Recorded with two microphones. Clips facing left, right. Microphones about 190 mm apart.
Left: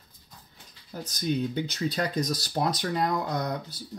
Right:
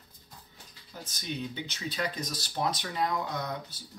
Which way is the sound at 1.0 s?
40° left (ahead or behind).